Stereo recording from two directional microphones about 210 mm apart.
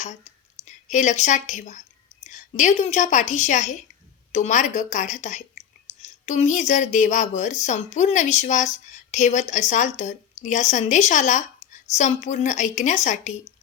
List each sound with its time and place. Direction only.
0.0 s a woman's voice: 35° left (ahead or behind)